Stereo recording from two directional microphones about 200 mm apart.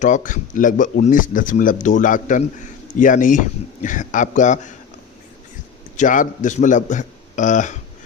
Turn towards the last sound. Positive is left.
turn(degrees=40)  # may be behind; listen again after turning